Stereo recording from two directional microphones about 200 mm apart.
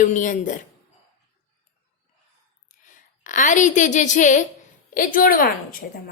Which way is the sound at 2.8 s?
40° left (ahead or behind).